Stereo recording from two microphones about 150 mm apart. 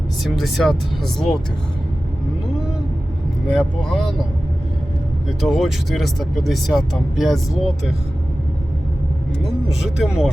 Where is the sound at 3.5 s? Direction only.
Centre (ahead or behind).